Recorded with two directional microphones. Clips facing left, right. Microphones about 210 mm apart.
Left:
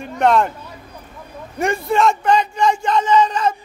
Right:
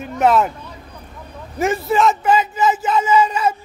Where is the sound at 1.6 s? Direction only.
Centre (ahead or behind).